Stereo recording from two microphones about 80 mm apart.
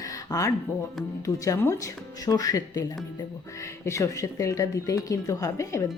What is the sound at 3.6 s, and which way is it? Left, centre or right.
Speech, left.